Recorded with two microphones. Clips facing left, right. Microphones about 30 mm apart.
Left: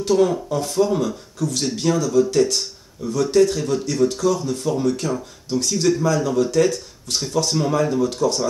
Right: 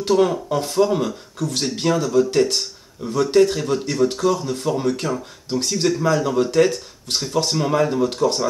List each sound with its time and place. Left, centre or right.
0.0 s speech: right